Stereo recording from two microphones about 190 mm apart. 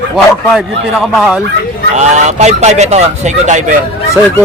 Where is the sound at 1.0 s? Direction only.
Centre (ahead or behind).